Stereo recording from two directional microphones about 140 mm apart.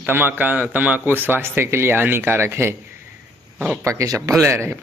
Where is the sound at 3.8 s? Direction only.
20° right (ahead or behind).